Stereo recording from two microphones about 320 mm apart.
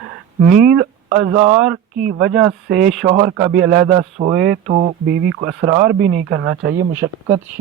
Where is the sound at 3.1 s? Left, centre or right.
Right.